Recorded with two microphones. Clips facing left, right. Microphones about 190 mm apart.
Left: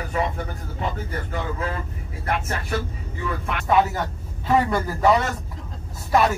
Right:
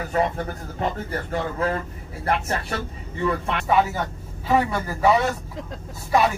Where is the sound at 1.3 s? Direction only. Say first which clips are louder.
Right 5 dB; 40° right (ahead or behind).